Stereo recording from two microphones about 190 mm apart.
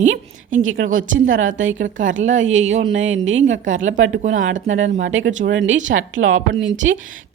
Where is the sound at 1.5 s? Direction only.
40° right (ahead or behind).